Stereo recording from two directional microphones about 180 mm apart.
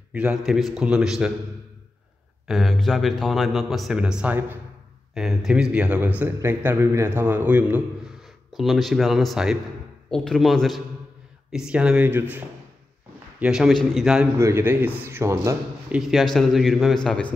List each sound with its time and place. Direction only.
0.1 s a man's voice: 5° right (ahead or behind)
2.4 s a man's voice: centre (ahead or behind)
16.0 s speech: centre (ahead or behind)